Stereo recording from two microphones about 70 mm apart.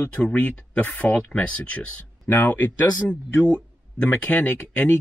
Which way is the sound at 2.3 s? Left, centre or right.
Left.